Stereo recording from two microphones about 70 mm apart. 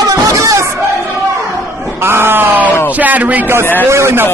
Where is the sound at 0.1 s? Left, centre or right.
Right.